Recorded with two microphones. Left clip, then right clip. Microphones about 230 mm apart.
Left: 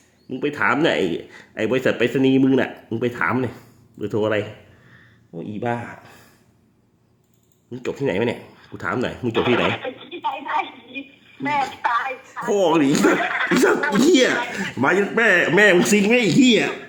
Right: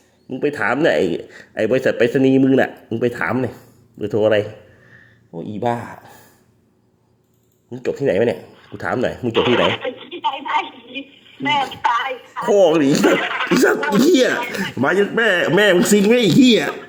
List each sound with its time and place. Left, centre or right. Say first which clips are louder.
0.3 s speech: right 1 dB; centre
7.7 s speech: right 5 dB; centre
9.6 s a sound: right 4 dB; right
11.7 s speech: right 3 dB; right